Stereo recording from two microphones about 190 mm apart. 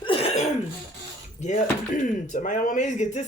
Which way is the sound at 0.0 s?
30° left (ahead or behind).